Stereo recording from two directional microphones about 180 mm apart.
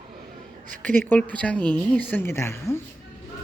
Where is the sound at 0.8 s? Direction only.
10° left (ahead or behind).